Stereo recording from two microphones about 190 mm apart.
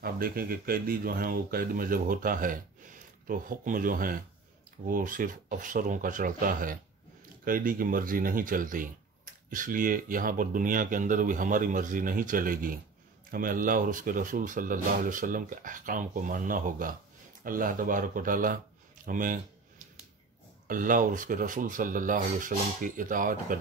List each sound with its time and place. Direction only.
0.0 s speech: 50° right (ahead or behind)
20.6 s speech: 45° right (ahead or behind)